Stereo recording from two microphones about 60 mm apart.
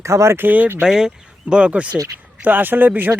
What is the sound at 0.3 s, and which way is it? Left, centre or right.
Speech, right.